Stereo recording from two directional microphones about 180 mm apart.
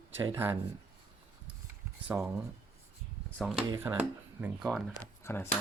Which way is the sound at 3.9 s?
15° right (ahead or behind).